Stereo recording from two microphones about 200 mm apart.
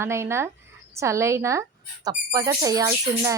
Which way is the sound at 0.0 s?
15° right (ahead or behind).